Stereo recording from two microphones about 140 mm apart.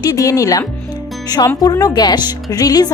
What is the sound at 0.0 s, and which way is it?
Speech, 25° left (ahead or behind).